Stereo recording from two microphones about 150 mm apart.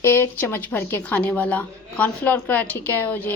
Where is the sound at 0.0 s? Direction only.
15° left (ahead or behind).